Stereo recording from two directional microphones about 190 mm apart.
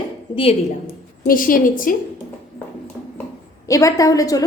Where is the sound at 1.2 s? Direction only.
45° left (ahead or behind).